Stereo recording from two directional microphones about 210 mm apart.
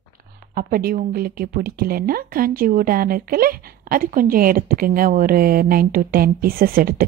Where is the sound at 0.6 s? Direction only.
45° right (ahead or behind).